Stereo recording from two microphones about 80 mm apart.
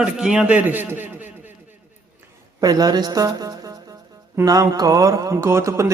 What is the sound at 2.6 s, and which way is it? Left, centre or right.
A man's voice, right.